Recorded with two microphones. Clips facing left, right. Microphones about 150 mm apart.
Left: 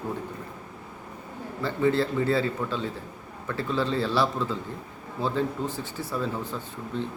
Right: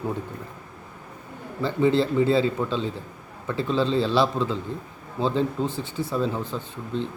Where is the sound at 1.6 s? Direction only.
20° right (ahead or behind).